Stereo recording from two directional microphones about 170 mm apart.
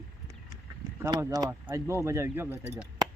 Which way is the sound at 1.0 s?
20° right (ahead or behind).